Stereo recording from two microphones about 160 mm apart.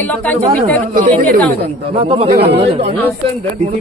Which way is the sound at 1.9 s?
40° right (ahead or behind).